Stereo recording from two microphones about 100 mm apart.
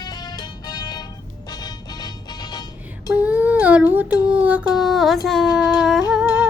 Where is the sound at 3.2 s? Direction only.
15° right (ahead or behind).